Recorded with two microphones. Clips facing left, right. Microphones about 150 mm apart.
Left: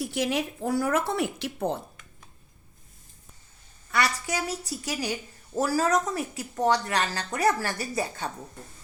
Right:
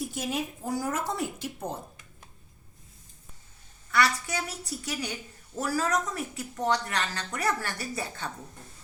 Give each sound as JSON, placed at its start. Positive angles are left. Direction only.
{"t": 0.0, "sound": "speech", "side_deg": 75}
{"t": 3.9, "sound": "speech", "side_deg": 25}